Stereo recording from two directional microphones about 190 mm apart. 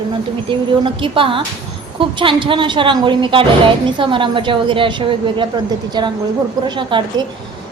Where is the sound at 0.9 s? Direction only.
25° right (ahead or behind).